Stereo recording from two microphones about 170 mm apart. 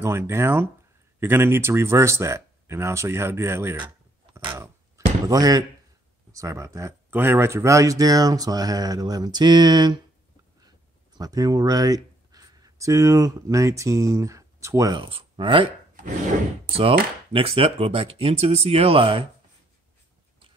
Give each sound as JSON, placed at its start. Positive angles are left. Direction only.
{"t": 0.0, "sound": "speech", "side_deg": -15}
{"t": 4.6, "sound": "a sound", "side_deg": -20}
{"t": 6.3, "sound": "speech", "side_deg": -15}
{"t": 11.1, "sound": "speech", "side_deg": -20}
{"t": 17.3, "sound": "speech", "side_deg": -35}